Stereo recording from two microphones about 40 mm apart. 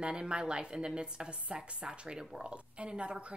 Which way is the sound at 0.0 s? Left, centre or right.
Right.